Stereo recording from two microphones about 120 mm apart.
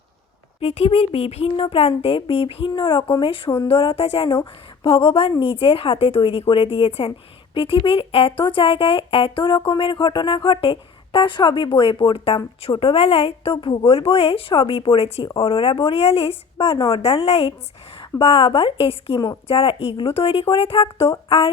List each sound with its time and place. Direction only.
0.6 s speech: 60° left (ahead or behind)